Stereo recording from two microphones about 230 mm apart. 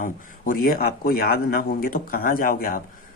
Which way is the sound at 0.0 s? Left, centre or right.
Left.